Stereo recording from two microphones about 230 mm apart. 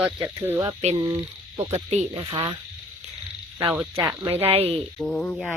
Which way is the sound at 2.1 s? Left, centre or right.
Centre.